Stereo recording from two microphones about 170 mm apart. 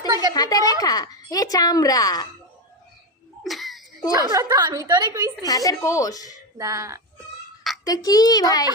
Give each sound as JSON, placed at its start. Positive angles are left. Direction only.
{"t": 0.1, "sound": "a sound", "side_deg": -25}
{"t": 0.3, "sound": "a woman's voice", "side_deg": 20}
{"t": 3.4, "sound": "a sound", "side_deg": 0}
{"t": 4.3, "sound": "a woman's voice", "side_deg": -20}
{"t": 5.5, "sound": "a woman's voice", "side_deg": 20}
{"t": 6.6, "sound": "a woman's voice", "side_deg": -20}
{"t": 7.9, "sound": "a woman's voice", "side_deg": 20}